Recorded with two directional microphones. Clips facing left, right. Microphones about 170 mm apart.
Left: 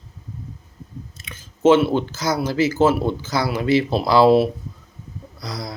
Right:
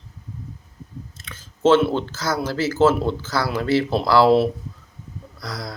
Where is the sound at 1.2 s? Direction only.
15° left (ahead or behind).